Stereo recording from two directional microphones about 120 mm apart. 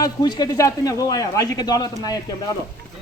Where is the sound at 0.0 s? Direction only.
35° left (ahead or behind).